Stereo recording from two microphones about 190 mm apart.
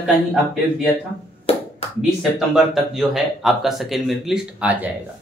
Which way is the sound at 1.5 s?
30° left (ahead or behind).